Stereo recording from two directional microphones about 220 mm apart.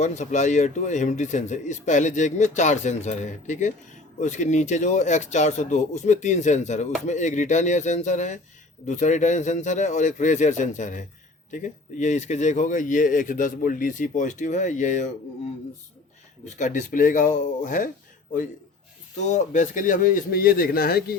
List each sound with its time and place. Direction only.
0.0 s speech: 30° left (ahead or behind)
16.6 s speech: 35° left (ahead or behind)
19.2 s speech: 35° left (ahead or behind)